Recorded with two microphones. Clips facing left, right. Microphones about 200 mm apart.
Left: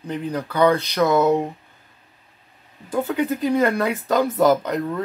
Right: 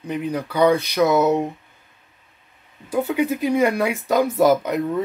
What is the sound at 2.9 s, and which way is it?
Speech, 10° right (ahead or behind).